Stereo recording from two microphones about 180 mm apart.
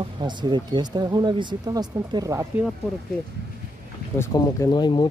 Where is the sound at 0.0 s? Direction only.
25° right (ahead or behind).